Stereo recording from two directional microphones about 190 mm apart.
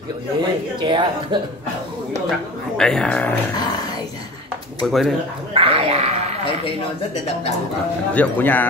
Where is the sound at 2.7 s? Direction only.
5° left (ahead or behind).